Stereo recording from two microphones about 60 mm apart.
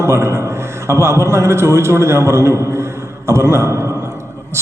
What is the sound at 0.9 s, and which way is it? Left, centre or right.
A man's voice, right.